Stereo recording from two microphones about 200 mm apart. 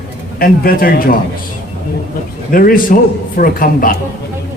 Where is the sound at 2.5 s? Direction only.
45° left (ahead or behind).